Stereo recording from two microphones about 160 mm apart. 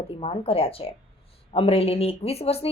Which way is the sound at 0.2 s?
35° left (ahead or behind).